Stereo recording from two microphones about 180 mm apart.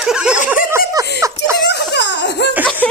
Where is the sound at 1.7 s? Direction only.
75° left (ahead or behind).